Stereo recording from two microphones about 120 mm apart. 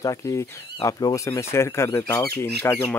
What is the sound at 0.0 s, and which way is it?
Speech, 25° left (ahead or behind).